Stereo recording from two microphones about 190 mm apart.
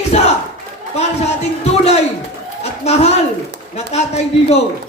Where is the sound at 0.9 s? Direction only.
35° left (ahead or behind).